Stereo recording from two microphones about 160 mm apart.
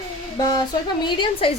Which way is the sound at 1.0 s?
30° left (ahead or behind).